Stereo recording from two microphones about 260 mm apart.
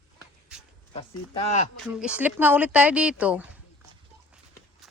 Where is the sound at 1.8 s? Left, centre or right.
Centre.